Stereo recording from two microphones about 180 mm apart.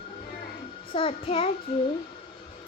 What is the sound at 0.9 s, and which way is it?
Speech, 30° left (ahead or behind).